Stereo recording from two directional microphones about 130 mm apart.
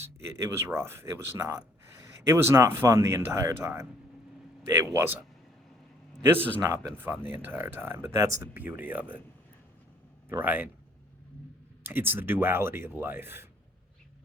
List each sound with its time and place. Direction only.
0.0 s speech: 20° right (ahead or behind)
6.7 s speech: 20° right (ahead or behind)
10.2 s speech: 15° right (ahead or behind)
11.8 s speech: 15° right (ahead or behind)